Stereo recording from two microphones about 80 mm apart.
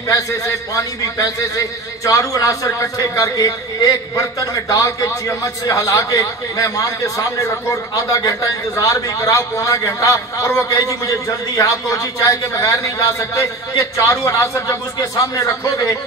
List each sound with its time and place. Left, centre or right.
0.1 s a man's voice: left